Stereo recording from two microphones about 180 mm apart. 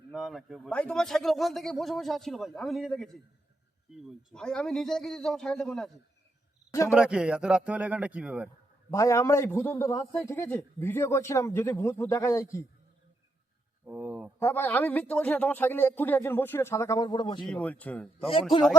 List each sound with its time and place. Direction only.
0.1 s speech: centre (ahead or behind)
6.9 s speech: 5° right (ahead or behind)
8.9 s a man's voice: 15° left (ahead or behind)
13.8 s speech: 10° right (ahead or behind)
14.3 s a man's voice: 10° left (ahead or behind)
17.4 s a man's voice: 5° left (ahead or behind)